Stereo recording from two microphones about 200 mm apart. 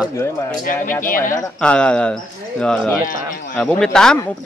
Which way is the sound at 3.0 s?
40° left (ahead or behind).